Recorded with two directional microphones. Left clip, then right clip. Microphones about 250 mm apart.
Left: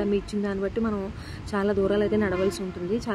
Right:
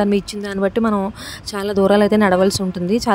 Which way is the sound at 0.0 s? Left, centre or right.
Right.